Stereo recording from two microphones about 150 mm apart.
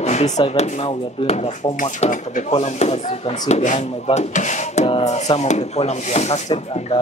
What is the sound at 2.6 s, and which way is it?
Speech, 45° left (ahead or behind).